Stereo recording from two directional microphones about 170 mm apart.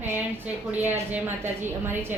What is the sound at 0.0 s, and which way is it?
A woman's voice, 10° right (ahead or behind).